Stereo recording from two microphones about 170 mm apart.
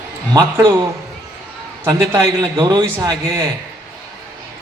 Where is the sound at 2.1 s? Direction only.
25° right (ahead or behind).